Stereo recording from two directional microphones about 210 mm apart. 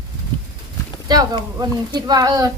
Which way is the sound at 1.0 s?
20° right (ahead or behind).